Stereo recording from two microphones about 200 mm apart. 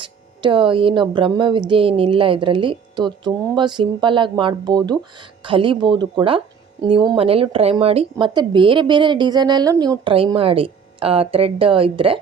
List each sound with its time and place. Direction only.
0.0 s speech: 25° right (ahead or behind)